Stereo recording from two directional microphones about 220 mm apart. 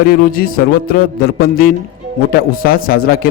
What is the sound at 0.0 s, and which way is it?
A man's voice, 40° left (ahead or behind).